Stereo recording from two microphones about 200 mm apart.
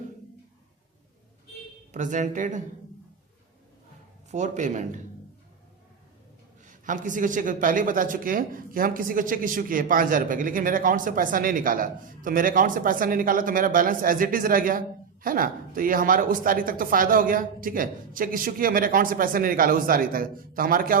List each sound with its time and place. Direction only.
1.9 s speech: 40° right (ahead or behind)
4.3 s speech: 35° right (ahead or behind)
6.7 s a woman's voice: 40° right (ahead or behind)